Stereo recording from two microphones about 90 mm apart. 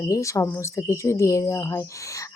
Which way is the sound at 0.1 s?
35° left (ahead or behind).